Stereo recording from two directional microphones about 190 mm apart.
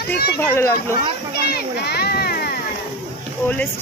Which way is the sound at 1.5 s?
55° left (ahead or behind).